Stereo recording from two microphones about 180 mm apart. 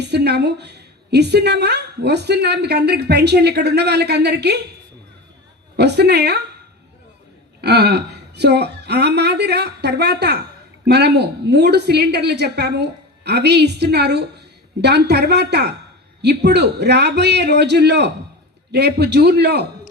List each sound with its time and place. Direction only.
0.0 s a woman's voice: 65° right (ahead or behind)
5.7 s a woman's voice: 65° right (ahead or behind)
7.6 s a woman's voice: 65° right (ahead or behind)